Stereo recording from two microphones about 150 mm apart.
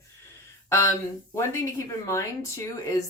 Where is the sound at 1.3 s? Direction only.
20° left (ahead or behind).